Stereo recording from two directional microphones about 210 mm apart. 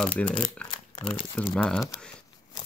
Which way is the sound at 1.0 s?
25° left (ahead or behind).